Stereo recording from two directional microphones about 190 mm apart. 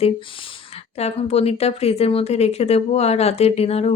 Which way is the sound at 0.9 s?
35° left (ahead or behind).